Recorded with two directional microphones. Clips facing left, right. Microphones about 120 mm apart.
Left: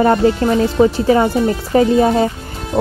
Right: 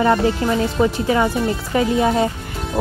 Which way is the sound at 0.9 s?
30° left (ahead or behind).